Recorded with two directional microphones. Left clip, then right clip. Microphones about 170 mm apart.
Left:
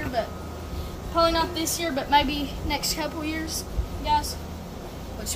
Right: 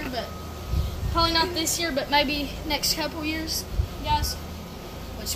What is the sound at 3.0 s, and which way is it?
Speech, centre (ahead or behind).